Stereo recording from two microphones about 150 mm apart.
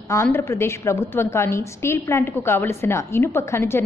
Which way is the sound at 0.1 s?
15° left (ahead or behind).